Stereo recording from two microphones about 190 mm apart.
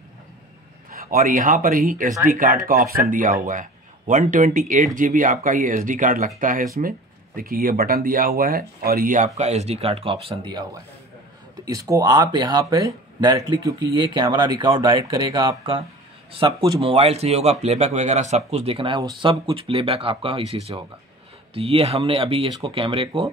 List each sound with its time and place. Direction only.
0.9 s speech: 45° right (ahead or behind); by 23.2 s 30° right (ahead or behind)